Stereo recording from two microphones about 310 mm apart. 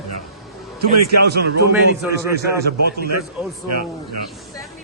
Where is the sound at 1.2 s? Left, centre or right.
Right.